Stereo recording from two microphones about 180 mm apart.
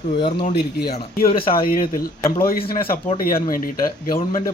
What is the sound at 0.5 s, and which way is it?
Speech, 60° left (ahead or behind).